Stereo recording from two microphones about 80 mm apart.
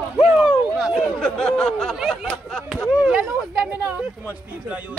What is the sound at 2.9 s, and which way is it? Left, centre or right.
Speech, centre.